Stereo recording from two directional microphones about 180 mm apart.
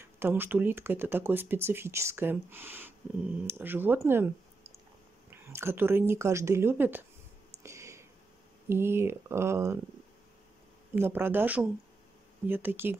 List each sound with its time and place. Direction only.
0.0 s speech: 10° right (ahead or behind)
5.3 s speech: 15° right (ahead or behind)
7.6 s a sound: 15° right (ahead or behind)
8.6 s speech: 15° right (ahead or behind)
11.0 s speech: 10° right (ahead or behind)